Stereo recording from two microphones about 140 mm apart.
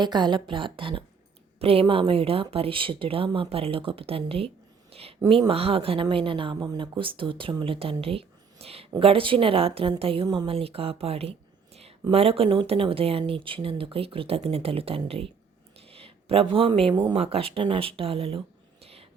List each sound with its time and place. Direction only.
0.0 s speech: 30° right (ahead or behind)
8.0 s a sound: 40° right (ahead or behind)
9.0 s speech: 40° right (ahead or behind)
11.7 s a sound: 45° right (ahead or behind)
12.1 s speech: 45° right (ahead or behind)
17.2 s speech: 45° right (ahead or behind)